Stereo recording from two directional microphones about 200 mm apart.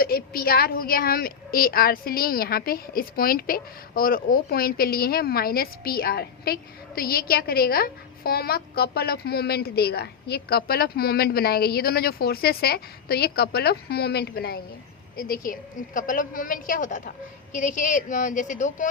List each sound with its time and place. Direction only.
0.0 s a woman's voice: 50° left (ahead or behind)